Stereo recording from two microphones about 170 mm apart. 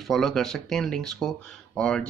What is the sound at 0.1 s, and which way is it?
Speech, centre (ahead or behind).